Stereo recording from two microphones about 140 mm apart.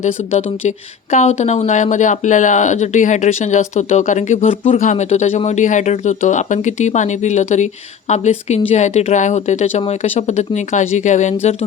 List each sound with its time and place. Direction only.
0.0 s speech: 50° left (ahead or behind)